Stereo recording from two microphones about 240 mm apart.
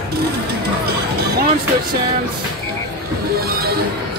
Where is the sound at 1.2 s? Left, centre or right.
Right.